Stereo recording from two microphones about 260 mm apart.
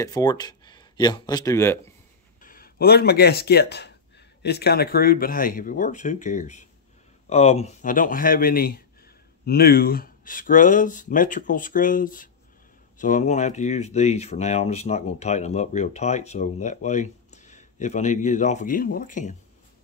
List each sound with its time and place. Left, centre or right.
0.0 s speech: centre
2.4 s speech: left